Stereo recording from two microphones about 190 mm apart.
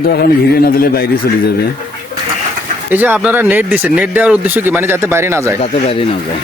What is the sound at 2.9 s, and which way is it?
Speech, 10° right (ahead or behind).